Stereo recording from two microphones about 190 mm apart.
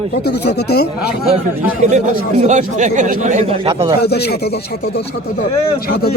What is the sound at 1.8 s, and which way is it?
Speech, 40° right (ahead or behind).